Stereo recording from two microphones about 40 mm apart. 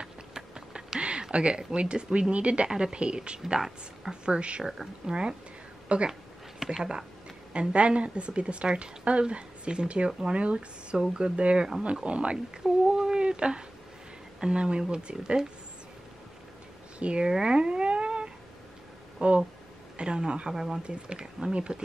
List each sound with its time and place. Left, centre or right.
0.0 s a sound: centre
1.3 s speech: right
6.6 s speech: centre
7.5 s speech: right
12.8 s a sound: right
14.4 s speech: right
17.0 s speech: right
17.3 s a sound: centre
19.2 s speech: right